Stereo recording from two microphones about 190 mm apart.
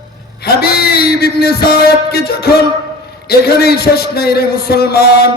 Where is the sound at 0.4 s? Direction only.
55° left (ahead or behind).